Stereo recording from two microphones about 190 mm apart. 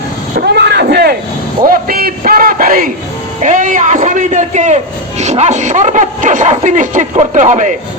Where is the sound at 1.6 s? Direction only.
50° right (ahead or behind).